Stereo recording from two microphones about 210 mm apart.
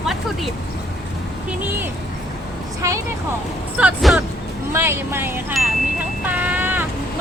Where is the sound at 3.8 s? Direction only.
5° right (ahead or behind).